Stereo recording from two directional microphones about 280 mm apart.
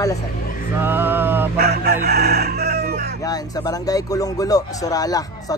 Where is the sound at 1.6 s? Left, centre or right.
Right.